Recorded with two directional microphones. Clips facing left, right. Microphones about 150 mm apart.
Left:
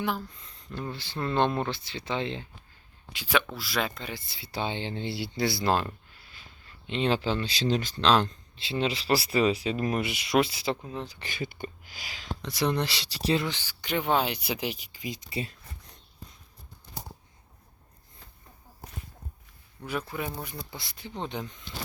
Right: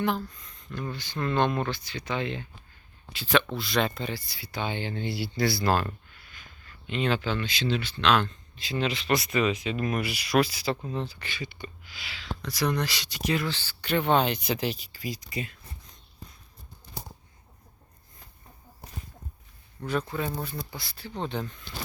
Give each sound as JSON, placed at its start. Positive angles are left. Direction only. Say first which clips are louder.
{"t": 0.0, "sound": "speech", "louder": "right 3 dB", "side_deg": 5}
{"t": 0.3, "sound": "speech", "louder": "right 1 dB", "side_deg": 30}
{"t": 3.1, "sound": "speech", "louder": "right 3 dB", "side_deg": 10}
{"t": 4.1, "sound": "speech", "louder": "right 1 dB", "side_deg": 25}
{"t": 10.8, "sound": "speech", "louder": "right 4 dB", "side_deg": 10}
{"t": 11.2, "sound": "speech", "louder": "left 3 dB", "side_deg": 50}
{"t": 12.4, "sound": "speech", "louder": "even", "side_deg": 25}
{"t": 13.5, "sound": "speech", "louder": "right 3 dB", "side_deg": 15}
{"t": 19.8, "sound": "speech", "louder": "right 3 dB", "side_deg": 10}